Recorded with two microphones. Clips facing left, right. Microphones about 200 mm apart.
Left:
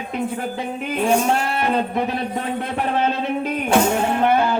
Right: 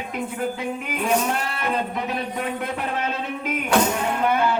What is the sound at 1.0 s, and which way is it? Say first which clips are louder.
Speech: left 4 dB; 30° left (ahead or behind).